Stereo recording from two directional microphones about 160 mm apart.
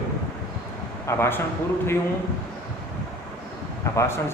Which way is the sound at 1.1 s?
15° left (ahead or behind).